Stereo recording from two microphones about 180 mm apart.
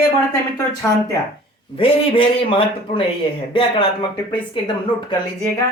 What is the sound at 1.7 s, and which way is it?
Speech, 30° left (ahead or behind).